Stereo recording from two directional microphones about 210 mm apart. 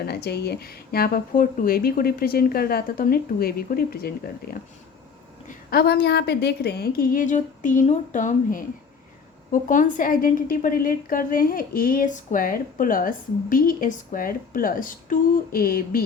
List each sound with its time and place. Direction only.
0.0 s speech: 50° left (ahead or behind)
5.5 s a woman's voice: 50° left (ahead or behind)